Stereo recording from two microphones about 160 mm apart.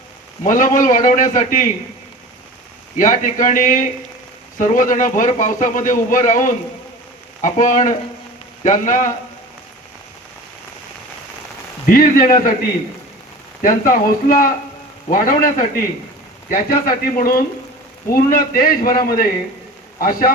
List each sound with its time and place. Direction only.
0.4 s speech: 55° left (ahead or behind)
3.0 s speech: 55° left (ahead or behind)
7.4 s frying: 55° left (ahead or behind)
11.9 s speech: 60° left (ahead or behind)
13.6 s speech: 60° left (ahead or behind)